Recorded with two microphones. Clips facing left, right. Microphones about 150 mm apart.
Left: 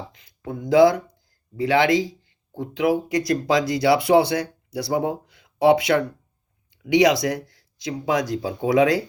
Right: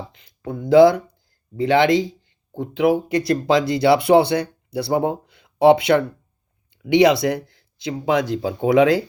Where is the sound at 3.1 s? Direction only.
30° right (ahead or behind).